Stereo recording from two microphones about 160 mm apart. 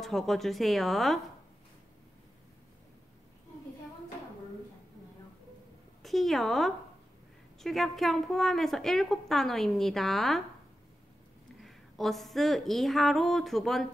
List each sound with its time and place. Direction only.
0.0 s a woman's voice: centre (ahead or behind)
6.0 s a woman's voice: centre (ahead or behind)
11.6 s a woman's voice: centre (ahead or behind)